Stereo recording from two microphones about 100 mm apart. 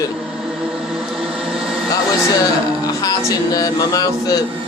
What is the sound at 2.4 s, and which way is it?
Speech, 40° left (ahead or behind).